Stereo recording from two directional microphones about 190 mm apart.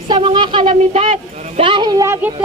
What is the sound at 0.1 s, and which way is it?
Speech, 25° right (ahead or behind).